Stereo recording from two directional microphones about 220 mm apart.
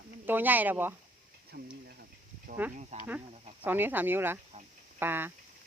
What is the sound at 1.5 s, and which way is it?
Speech, 45° right (ahead or behind).